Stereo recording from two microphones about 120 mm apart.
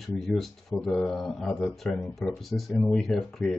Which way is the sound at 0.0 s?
Centre (ahead or behind).